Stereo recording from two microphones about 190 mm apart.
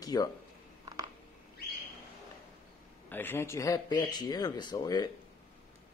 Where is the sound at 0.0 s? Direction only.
20° left (ahead or behind).